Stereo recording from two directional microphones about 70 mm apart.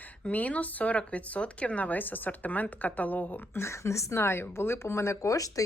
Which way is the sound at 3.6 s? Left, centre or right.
Left.